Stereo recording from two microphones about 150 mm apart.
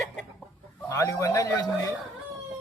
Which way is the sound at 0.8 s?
20° left (ahead or behind).